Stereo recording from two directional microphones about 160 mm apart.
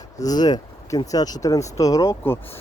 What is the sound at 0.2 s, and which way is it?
Speech, 25° left (ahead or behind).